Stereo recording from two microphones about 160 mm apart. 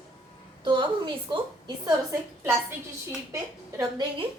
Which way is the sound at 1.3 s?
30° right (ahead or behind).